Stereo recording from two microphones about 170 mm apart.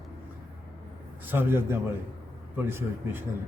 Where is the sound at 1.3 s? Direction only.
15° right (ahead or behind).